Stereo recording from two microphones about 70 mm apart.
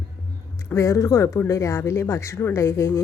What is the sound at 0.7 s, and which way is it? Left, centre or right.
Speech, left.